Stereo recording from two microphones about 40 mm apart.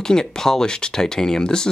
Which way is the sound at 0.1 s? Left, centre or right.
Centre.